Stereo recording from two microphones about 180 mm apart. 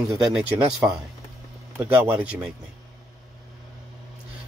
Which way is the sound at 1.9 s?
5° right (ahead or behind).